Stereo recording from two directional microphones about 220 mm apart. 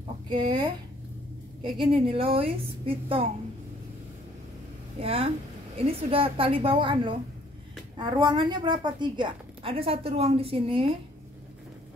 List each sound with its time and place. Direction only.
0.3 s a woman's voice: 20° right (ahead or behind)
5.0 s a woman's voice: 25° right (ahead or behind)